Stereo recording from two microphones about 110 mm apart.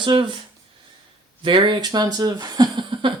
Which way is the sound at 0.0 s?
45° right (ahead or behind).